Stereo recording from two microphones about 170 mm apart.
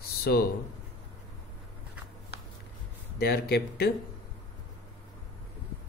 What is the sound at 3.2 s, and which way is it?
Speech, 70° left (ahead or behind).